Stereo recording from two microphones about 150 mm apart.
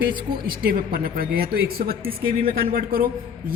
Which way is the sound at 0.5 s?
75° right (ahead or behind).